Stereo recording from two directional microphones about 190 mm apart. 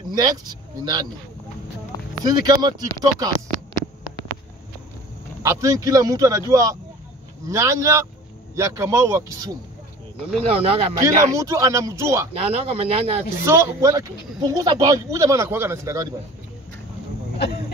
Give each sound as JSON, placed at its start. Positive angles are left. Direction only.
{"t": 0.1, "sound": "speech", "side_deg": -20}
{"t": 2.2, "sound": "speech", "side_deg": -20}
{"t": 5.4, "sound": "speech", "side_deg": -15}
{"t": 10.4, "sound": "speech", "side_deg": -30}
{"t": 11.3, "sound": "speech", "side_deg": -15}
{"t": 12.4, "sound": "speech", "side_deg": -30}
{"t": 13.4, "sound": "speech", "side_deg": -15}